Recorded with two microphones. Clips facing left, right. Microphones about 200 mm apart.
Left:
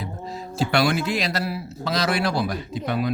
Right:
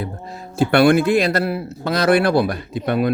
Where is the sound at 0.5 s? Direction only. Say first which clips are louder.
Right 8 dB; 55° right (ahead or behind).